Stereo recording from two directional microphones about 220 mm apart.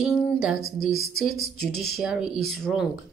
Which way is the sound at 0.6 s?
40° left (ahead or behind).